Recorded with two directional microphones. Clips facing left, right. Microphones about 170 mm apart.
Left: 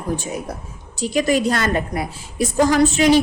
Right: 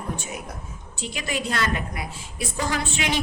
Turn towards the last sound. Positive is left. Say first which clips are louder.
# left 12 dB
turn(degrees=40)  # may be behind; listen again after turning